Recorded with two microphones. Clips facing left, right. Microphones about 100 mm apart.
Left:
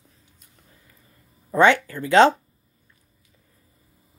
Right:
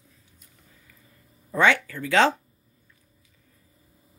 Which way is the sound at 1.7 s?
40° left (ahead or behind).